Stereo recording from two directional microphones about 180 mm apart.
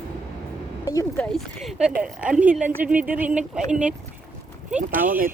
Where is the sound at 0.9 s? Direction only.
20° left (ahead or behind).